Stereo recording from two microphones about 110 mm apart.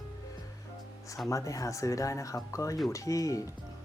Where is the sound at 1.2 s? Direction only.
30° left (ahead or behind).